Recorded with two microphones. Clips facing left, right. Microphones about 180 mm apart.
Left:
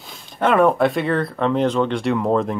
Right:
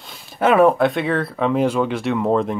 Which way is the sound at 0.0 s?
5° right (ahead or behind).